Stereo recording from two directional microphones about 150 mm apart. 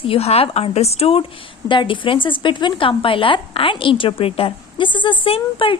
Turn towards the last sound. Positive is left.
turn(degrees=35)  # may be behind; listen again after turning